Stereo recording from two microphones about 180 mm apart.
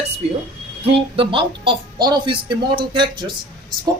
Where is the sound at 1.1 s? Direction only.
30° right (ahead or behind).